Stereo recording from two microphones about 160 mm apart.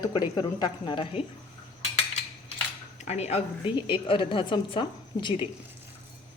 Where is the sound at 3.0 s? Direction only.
45° left (ahead or behind).